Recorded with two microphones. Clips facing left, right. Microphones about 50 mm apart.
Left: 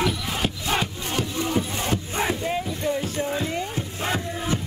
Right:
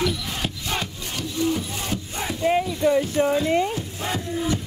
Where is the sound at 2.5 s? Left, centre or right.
Right.